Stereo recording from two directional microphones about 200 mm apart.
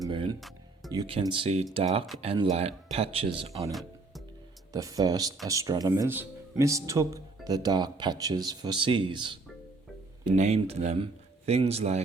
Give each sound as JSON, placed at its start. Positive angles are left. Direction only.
{"t": 0.0, "sound": "speech", "side_deg": -25}
{"t": 0.3, "sound": "music", "side_deg": 0}
{"t": 0.9, "sound": "speech", "side_deg": -25}
{"t": 3.7, "sound": "music", "side_deg": 0}
{"t": 4.7, "sound": "speech", "side_deg": -15}